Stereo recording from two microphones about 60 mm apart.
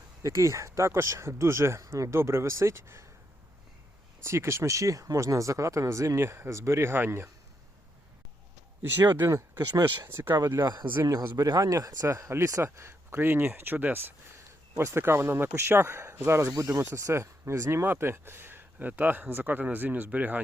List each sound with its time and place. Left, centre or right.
0.2 s speech: right
1.8 s speech: right
4.2 s speech: right
8.8 s speech: right
10.4 s speech: right
11.0 s speech: right
12.6 s speech: right
14.3 s speech: right
17.8 s speech: right